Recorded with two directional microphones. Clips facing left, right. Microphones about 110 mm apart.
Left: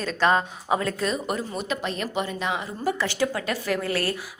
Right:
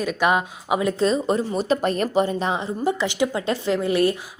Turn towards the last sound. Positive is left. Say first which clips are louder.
# right 6 dB
turn(degrees=-20)  # may be behind; listen again after turning